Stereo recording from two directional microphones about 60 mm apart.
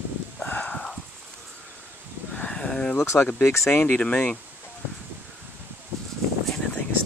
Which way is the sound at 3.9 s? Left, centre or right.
Centre.